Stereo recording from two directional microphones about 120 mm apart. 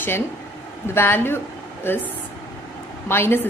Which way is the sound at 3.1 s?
20° left (ahead or behind).